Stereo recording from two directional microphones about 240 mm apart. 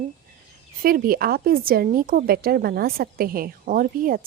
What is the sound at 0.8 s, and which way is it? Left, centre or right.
A woman's voice, right.